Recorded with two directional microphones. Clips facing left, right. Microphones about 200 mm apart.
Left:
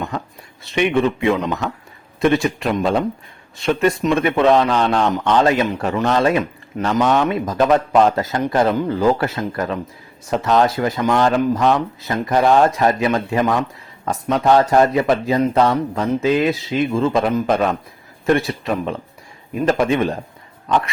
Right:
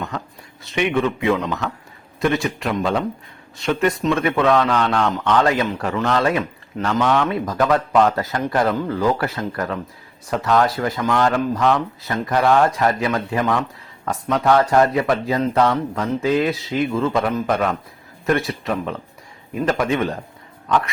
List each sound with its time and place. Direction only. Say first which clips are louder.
0.8 s a man's voice: left 3 dB; 20° left (ahead or behind)